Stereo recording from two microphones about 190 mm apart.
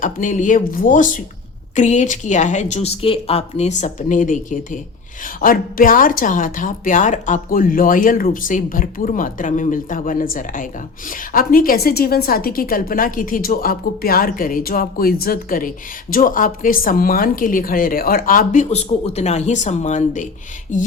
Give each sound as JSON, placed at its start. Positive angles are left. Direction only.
{"t": 0.0, "sound": "a woman's voice", "side_deg": 45}